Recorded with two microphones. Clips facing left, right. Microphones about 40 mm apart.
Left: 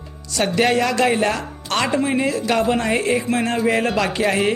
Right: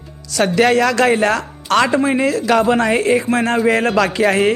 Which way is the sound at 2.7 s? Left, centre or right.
Right.